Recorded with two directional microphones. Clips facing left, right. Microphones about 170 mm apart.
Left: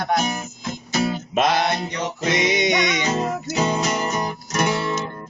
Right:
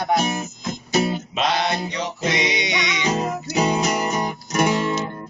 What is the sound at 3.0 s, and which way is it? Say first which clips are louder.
Music: even; 15° right (ahead or behind).